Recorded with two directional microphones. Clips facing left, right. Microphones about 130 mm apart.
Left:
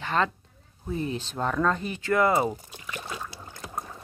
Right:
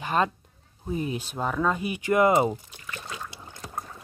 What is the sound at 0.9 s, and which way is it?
Speech, 15° right (ahead or behind).